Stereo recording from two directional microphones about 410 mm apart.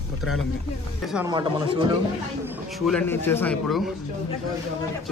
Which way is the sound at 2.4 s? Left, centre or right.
Centre.